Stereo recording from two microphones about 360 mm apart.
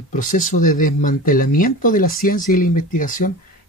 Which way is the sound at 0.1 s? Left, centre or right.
Left.